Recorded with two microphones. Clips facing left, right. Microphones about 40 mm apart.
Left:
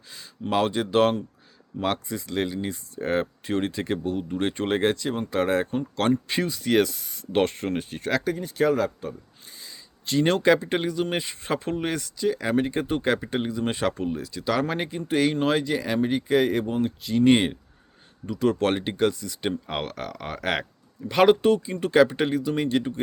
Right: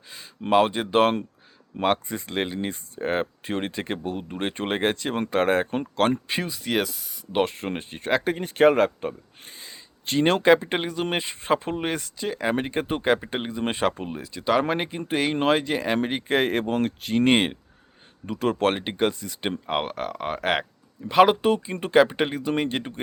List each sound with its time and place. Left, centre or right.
0.5 s speech: right
6.2 s speech: centre
8.2 s speech: right; by 13.3 s centre
13.3 s speech: right
21.5 s speech: right